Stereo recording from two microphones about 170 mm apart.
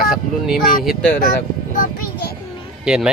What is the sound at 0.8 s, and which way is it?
Speech, centre (ahead or behind).